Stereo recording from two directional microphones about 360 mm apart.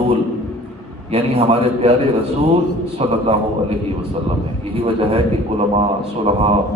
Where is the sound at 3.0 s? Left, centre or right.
Centre.